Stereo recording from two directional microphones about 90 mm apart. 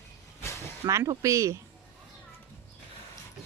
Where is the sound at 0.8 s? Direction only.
35° right (ahead or behind).